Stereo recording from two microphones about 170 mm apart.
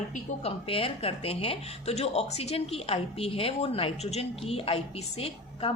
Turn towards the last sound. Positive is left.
turn(degrees=35)  # may be behind; listen again after turning